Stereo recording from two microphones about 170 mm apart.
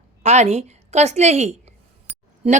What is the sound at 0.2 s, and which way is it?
A woman's voice, 40° right (ahead or behind).